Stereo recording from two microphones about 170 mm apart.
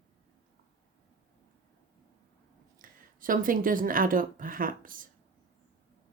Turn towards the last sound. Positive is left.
turn(degrees=-55)  # may be behind; listen again after turning